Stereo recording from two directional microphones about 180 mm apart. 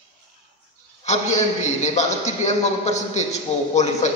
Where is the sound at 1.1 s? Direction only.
40° left (ahead or behind).